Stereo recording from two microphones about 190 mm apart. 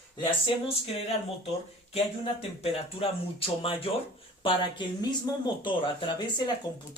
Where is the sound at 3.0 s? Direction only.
30° left (ahead or behind).